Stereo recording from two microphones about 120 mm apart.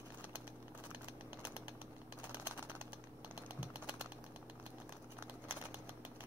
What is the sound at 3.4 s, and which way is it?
Typing, 15° right (ahead or behind).